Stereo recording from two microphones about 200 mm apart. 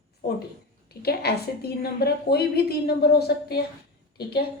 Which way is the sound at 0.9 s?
50° left (ahead or behind).